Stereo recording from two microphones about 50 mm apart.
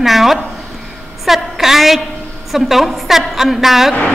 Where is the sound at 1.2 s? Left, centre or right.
Centre.